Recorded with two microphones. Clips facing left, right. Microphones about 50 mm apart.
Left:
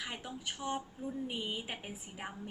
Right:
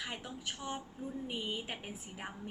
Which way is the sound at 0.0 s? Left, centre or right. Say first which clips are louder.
Even; centre.